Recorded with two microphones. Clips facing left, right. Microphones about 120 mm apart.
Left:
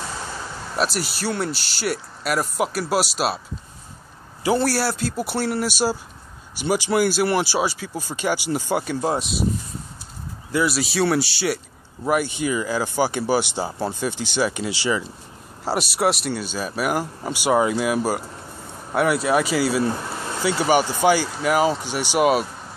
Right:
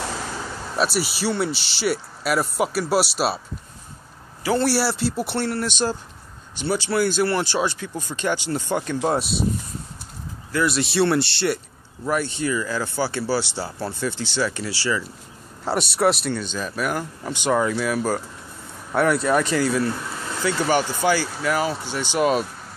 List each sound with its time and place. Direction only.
0.7 s speech: 5° right (ahead or behind)
4.6 s speech: centre (ahead or behind)
10.5 s speech: 5° left (ahead or behind)
15.6 s speech: 5° left (ahead or behind)
18.9 s speech: 5° left (ahead or behind)